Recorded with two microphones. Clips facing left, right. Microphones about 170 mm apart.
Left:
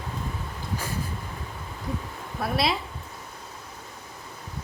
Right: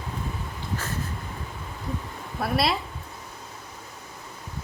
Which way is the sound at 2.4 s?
Centre (ahead or behind).